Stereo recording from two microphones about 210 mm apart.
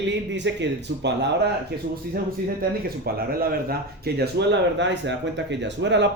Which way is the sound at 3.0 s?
45° right (ahead or behind).